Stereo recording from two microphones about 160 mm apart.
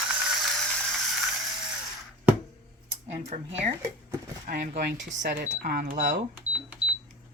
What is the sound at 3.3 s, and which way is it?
Speech, 45° right (ahead or behind).